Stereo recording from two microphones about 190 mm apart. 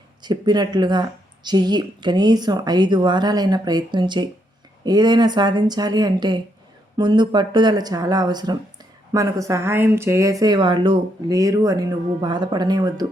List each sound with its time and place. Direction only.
0.2 s a woman's voice: 20° right (ahead or behind)